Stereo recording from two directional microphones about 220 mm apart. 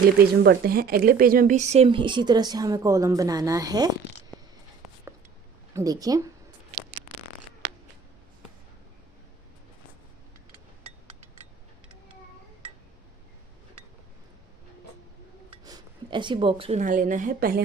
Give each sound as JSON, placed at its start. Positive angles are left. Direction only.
{"t": 0.4, "sound": "speech", "side_deg": -45}
{"t": 5.7, "sound": "speech", "side_deg": -15}
{"t": 15.6, "sound": "a woman's voice", "side_deg": -20}